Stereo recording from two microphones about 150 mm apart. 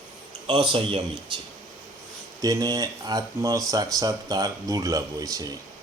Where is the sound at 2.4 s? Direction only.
25° right (ahead or behind).